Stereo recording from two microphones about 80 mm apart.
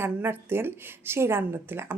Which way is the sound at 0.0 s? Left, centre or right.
Right.